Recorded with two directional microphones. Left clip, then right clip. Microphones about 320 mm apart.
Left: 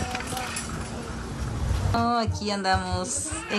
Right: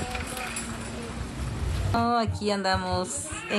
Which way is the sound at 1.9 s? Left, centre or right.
Centre.